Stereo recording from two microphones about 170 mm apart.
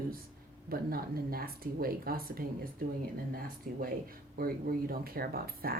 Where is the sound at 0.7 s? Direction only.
60° right (ahead or behind).